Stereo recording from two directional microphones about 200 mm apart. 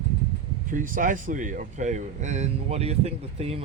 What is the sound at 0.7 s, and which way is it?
Speech, 40° right (ahead or behind).